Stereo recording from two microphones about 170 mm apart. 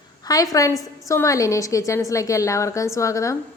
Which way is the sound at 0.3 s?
20° left (ahead or behind).